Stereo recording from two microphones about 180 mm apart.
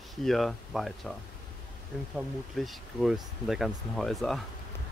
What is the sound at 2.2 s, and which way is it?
Speech, centre (ahead or behind).